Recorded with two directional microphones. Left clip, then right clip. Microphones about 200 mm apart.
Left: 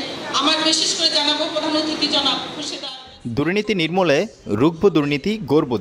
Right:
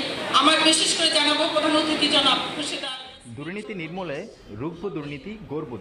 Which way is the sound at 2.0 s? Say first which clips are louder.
Left 1 dB; 15° left (ahead or behind).